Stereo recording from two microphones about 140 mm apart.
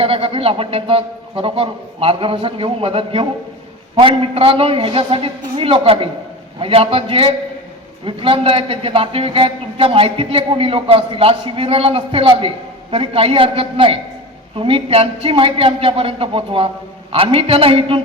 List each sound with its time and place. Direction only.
0.0 s a man's voice: 40° right (ahead or behind)